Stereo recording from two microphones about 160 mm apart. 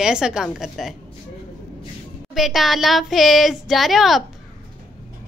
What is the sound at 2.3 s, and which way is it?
A woman's voice, centre (ahead or behind).